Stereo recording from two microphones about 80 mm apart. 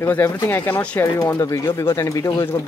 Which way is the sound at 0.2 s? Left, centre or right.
Left.